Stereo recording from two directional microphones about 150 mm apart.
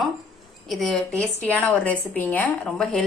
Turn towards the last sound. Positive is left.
turn(degrees=5)  # may be behind; listen again after turning